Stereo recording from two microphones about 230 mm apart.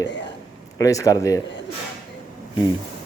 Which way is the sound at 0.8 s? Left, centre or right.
Centre.